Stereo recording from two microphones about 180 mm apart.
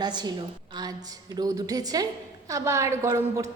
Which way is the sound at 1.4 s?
20° right (ahead or behind).